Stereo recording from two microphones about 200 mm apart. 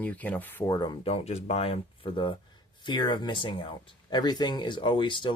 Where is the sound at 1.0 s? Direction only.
30° left (ahead or behind).